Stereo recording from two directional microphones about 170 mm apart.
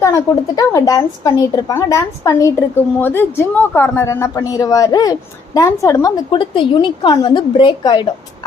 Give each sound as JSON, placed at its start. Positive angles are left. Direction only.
{"t": 0.0, "sound": "speech", "side_deg": 20}